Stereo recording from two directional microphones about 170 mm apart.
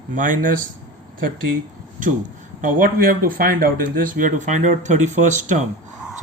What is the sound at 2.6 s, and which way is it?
Speech, 50° right (ahead or behind).